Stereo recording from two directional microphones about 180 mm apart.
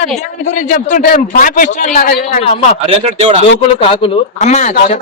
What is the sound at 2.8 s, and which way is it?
Speech, 35° right (ahead or behind).